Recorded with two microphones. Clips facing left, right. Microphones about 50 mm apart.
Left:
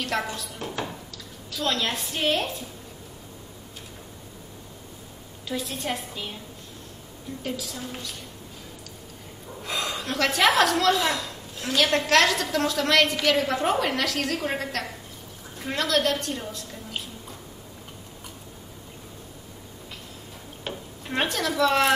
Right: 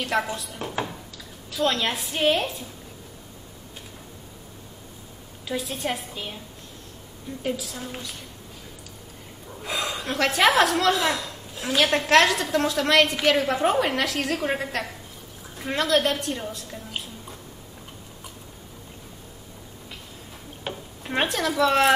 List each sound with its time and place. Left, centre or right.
0.1 s a woman's voice: centre
5.5 s a woman's voice: centre
7.4 s a woman's voice: centre
9.6 s a woman's voice: centre
20.6 s speech: centre